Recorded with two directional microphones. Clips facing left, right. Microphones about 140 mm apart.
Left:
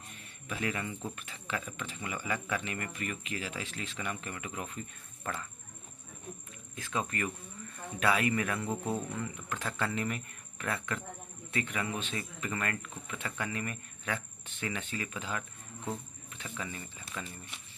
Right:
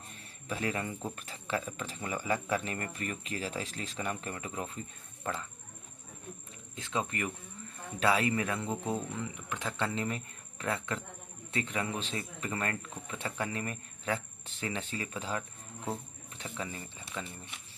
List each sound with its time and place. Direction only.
0.1 s a sound: 35° right (ahead or behind)
1.1 s speech: 35° right (ahead or behind)
6.7 s speech: 25° right (ahead or behind)